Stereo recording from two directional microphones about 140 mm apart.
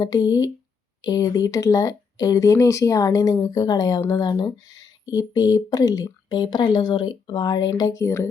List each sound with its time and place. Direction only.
0.0 s speech: 30° left (ahead or behind)